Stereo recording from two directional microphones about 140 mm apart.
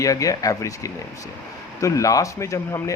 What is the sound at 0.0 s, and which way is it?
Speech, 25° left (ahead or behind).